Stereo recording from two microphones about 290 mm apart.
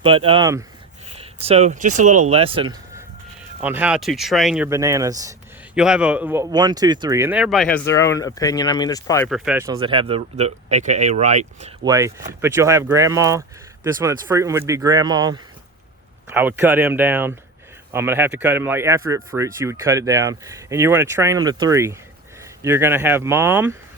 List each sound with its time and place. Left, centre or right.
0.0 s speech: centre
3.6 s speech: centre
9.3 s speech: centre; by 11.7 s right
11.9 s speech: centre